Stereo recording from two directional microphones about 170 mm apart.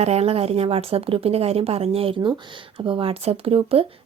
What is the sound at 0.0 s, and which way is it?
Speech, 40° right (ahead or behind).